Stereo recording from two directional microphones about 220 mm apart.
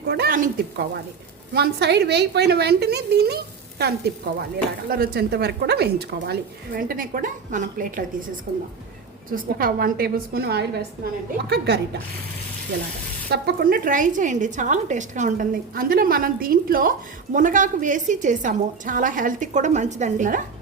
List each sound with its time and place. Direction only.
0.1 s a woman's voice: 45° right (ahead or behind)
13.3 s a woman's voice: 45° right (ahead or behind)